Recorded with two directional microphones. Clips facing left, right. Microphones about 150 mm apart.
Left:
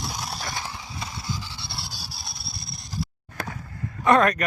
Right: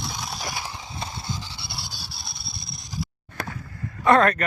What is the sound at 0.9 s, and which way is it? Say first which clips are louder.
Vehicle: right 1 dB; 25° right (ahead or behind).